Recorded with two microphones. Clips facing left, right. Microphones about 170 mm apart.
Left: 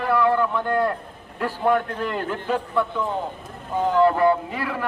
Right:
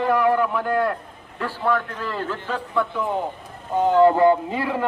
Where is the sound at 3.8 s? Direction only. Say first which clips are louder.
Right 3 dB; 20° right (ahead or behind).